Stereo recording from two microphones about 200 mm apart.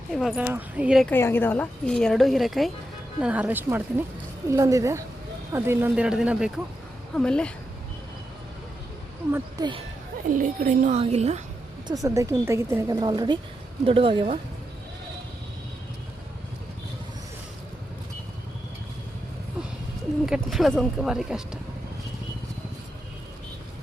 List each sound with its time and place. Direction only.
0.1 s speech: centre (ahead or behind)
1.1 s a woman's voice: 10° left (ahead or behind)
9.3 s speech: 20° right (ahead or behind)
10.2 s a woman's voice: 40° right (ahead or behind)
11.9 s a woman's voice: 15° right (ahead or behind)
20.2 s speech: centre (ahead or behind)